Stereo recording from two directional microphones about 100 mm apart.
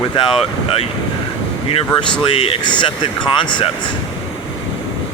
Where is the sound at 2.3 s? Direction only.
70° left (ahead or behind).